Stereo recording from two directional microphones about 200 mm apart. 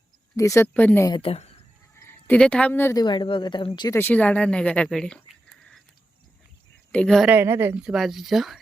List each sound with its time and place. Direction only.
0.3 s a woman's voice: 15° left (ahead or behind)
1.2 s speech: 30° left (ahead or behind)
2.0 s a woman's voice: 10° left (ahead or behind)
3.9 s speech: 10° left (ahead or behind)
6.9 s speech: 5° left (ahead or behind)
7.3 s a woman's voice: 10° right (ahead or behind)